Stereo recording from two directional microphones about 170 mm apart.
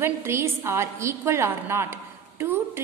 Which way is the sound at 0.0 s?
15° right (ahead or behind).